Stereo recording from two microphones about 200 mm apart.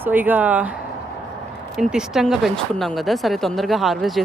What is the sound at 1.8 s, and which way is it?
Speech, 5° right (ahead or behind).